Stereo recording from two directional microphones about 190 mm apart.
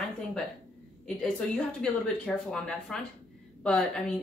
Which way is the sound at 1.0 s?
5° left (ahead or behind).